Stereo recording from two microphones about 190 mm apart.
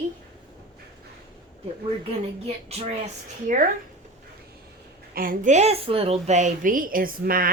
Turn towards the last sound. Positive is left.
turn(degrees=-50)  # may be behind; listen again after turning